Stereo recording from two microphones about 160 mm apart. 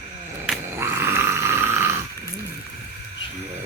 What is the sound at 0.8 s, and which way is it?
Snoring, 15° right (ahead or behind).